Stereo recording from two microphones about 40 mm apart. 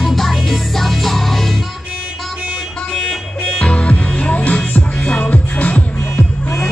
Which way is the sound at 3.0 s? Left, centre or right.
Centre.